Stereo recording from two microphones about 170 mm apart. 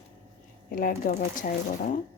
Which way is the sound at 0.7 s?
55° left (ahead or behind).